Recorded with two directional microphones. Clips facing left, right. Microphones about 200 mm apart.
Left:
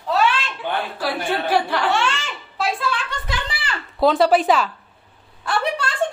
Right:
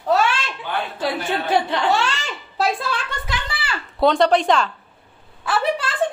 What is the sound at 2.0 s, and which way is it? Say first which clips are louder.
Laughter: left 1 dB; 40° right (ahead or behind).